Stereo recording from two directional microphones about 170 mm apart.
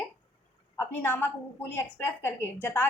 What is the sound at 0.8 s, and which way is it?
A woman's voice, 15° left (ahead or behind).